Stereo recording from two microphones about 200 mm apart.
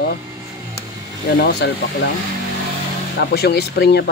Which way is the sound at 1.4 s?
55° left (ahead or behind).